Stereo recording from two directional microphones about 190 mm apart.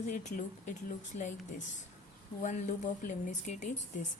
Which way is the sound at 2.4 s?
40° left (ahead or behind).